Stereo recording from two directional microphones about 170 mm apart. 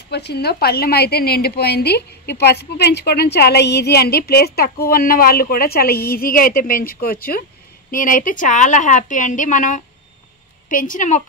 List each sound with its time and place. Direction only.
0.1 s a woman's voice: 75° left (ahead or behind); by 11.2 s 45° left (ahead or behind)